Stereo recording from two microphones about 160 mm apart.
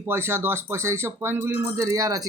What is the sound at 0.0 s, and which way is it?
Speech, 15° right (ahead or behind).